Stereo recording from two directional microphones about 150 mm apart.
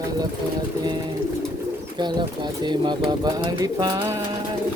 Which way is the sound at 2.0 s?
30° right (ahead or behind).